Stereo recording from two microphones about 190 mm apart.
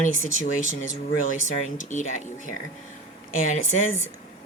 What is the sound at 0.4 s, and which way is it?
Speech, 45° left (ahead or behind).